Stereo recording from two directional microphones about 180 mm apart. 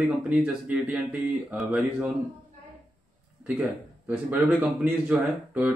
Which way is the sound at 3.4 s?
5° right (ahead or behind).